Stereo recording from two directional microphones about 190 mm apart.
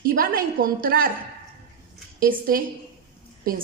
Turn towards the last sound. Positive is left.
turn(degrees=-50)  # may be behind; listen again after turning